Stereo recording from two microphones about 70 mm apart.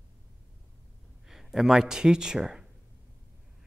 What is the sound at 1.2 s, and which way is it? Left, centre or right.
Speech, centre.